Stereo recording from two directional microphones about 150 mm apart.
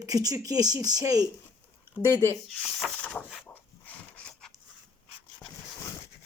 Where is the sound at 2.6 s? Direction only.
5° left (ahead or behind).